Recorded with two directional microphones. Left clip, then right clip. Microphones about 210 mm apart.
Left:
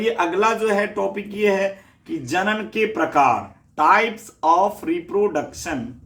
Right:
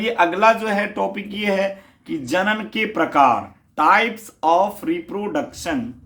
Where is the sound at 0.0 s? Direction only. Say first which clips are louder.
Right 3 dB; 35° right (ahead or behind).